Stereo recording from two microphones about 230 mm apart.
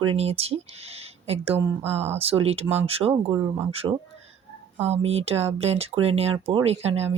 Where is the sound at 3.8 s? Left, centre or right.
Centre.